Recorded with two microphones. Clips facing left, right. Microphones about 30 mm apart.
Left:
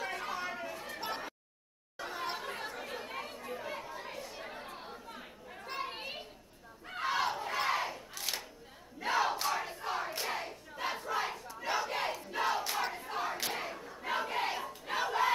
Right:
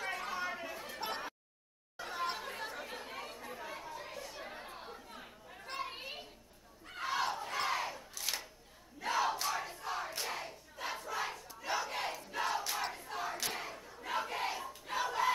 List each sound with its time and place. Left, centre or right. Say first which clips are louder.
0.0 s chatter: left 1 dB; centre
6.9 s battle cry: left 3 dB; centre
9.0 s crowd: left 2 dB; centre
9.8 s battle cry: left 3 dB; centre